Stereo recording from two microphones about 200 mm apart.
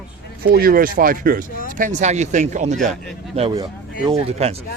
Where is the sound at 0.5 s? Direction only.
45° right (ahead or behind).